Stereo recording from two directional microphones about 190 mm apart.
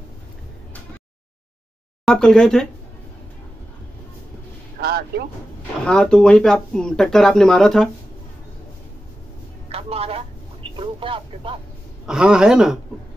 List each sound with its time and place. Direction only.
2.0 s speech: 5° left (ahead or behind)
4.7 s artillery fire: 55° right (ahead or behind)
5.9 s speech: 5° left (ahead or behind)
9.7 s vehicle: 30° right (ahead or behind)
12.1 s speech: 5° right (ahead or behind)